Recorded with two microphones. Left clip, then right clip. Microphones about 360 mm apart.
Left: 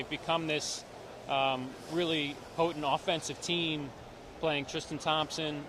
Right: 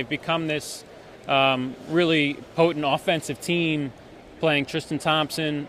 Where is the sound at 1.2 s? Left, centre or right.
Right.